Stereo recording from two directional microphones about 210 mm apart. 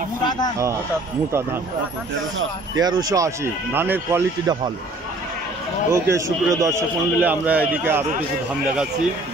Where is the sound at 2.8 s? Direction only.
20° right (ahead or behind).